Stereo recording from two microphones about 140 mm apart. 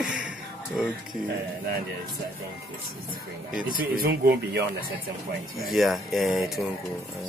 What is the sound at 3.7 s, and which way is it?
Speech, 90° right.